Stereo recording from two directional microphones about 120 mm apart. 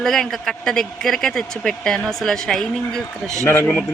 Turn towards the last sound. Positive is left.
turn(degrees=20)  # may be behind; listen again after turning